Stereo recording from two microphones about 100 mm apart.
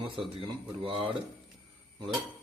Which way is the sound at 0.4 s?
55° right (ahead or behind).